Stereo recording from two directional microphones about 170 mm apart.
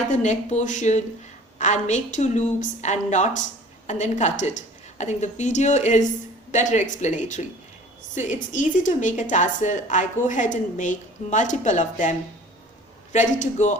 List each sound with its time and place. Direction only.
0.1 s a woman's voice: 45° left (ahead or behind)
13.4 s a woman's voice: 45° left (ahead or behind)